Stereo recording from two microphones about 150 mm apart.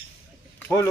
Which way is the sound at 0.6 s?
15° left (ahead or behind).